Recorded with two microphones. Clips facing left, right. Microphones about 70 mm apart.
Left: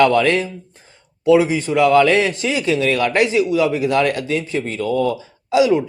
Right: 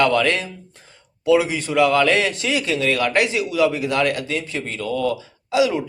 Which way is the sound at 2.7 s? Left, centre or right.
Left.